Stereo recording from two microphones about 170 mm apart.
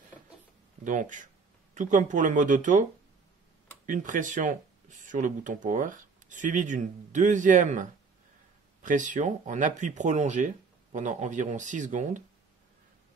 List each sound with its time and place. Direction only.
0.8 s speech: 50° right (ahead or behind)